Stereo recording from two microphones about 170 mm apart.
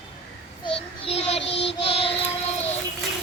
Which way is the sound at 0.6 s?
35° left (ahead or behind).